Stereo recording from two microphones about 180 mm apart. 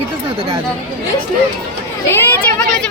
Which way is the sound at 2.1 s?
10° left (ahead or behind).